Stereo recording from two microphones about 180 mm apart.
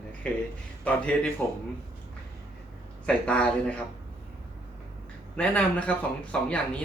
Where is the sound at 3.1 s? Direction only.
5° left (ahead or behind).